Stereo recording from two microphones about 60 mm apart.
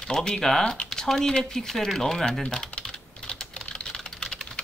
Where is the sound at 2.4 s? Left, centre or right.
Centre.